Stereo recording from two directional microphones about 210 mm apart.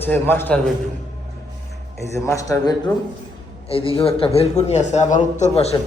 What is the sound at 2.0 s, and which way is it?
Speech, 15° left (ahead or behind).